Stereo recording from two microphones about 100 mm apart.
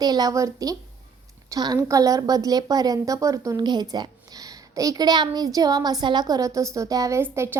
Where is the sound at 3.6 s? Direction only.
45° right (ahead or behind).